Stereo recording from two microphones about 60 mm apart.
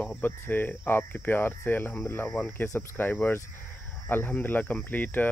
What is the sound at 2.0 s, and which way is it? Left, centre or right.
Speech, left.